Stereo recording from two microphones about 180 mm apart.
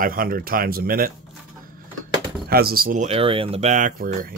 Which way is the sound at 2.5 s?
55° right (ahead or behind).